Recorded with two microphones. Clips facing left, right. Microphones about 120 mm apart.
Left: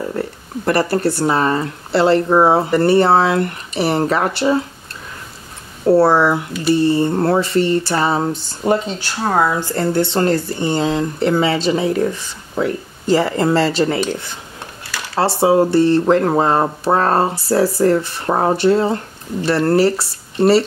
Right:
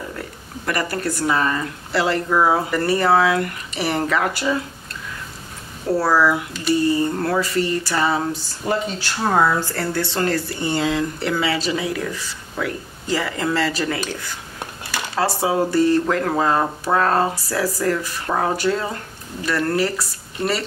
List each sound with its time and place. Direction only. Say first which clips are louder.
0.1 s speech: left 9 dB; 35° left (ahead or behind)
5.9 s speech: left 6 dB; 25° left (ahead or behind)
9.2 s speech: left 1 dB; 10° left (ahead or behind); by 20.6 s 30° left (ahead or behind)